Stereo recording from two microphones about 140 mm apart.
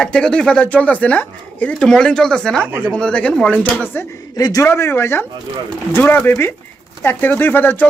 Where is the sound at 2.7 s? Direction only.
10° right (ahead or behind).